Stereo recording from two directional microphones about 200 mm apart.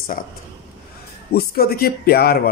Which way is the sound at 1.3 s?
50° left (ahead or behind).